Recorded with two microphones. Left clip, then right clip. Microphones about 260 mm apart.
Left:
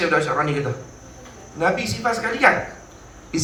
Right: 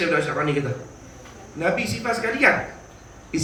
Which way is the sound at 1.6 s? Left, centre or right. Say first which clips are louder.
Left 2 dB; left.